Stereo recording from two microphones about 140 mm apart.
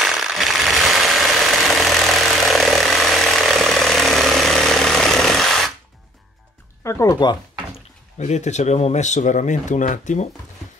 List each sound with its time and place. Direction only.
0.0 s a sound: centre (ahead or behind)
6.8 s speech: 20° left (ahead or behind)
8.2 s speech: 55° left (ahead or behind)